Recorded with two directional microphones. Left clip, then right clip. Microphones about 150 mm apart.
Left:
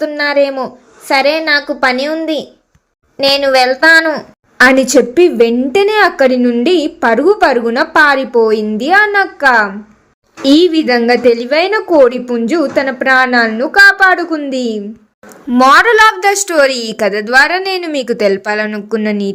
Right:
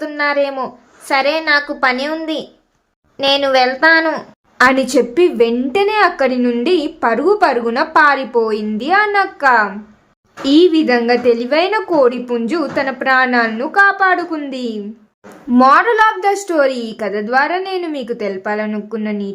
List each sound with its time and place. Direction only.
0.0 s a woman's voice: 30° left (ahead or behind)